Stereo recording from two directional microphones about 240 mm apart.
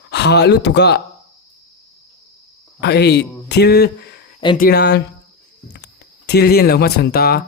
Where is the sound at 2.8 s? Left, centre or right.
Left.